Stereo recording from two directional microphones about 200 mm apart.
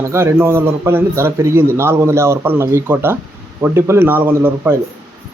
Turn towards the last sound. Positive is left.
turn(degrees=-10)  # may be behind; listen again after turning